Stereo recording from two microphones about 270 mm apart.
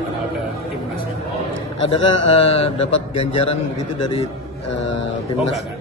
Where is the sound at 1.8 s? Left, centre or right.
Left.